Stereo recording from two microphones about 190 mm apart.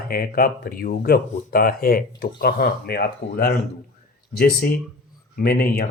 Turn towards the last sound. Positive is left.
turn(degrees=50)  # may be behind; listen again after turning